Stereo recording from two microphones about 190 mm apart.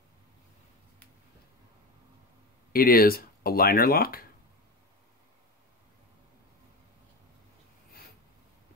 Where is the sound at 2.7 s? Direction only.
50° left (ahead or behind).